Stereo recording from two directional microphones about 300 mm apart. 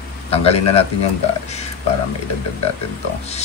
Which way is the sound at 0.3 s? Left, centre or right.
Centre.